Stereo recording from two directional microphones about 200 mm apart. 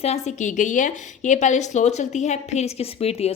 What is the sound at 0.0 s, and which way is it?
A woman's voice, 35° left (ahead or behind).